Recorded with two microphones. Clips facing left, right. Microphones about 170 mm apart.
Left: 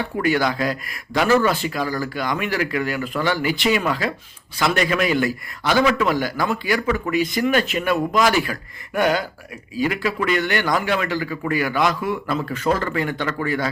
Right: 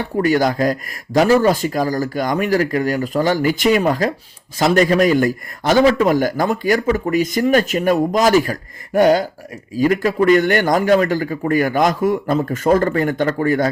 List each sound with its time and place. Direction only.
0.0 s a man's voice: 40° right (ahead or behind)